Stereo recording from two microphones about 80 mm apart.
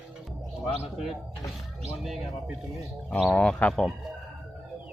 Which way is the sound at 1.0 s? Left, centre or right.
Centre.